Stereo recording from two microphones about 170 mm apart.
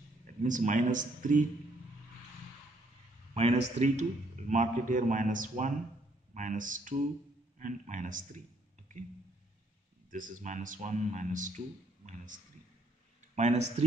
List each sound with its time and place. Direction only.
0.4 s a man's voice: 50° right (ahead or behind)
3.3 s a man's voice: 40° right (ahead or behind)
10.1 s a man's voice: 50° right (ahead or behind)
13.4 s speech: 40° right (ahead or behind)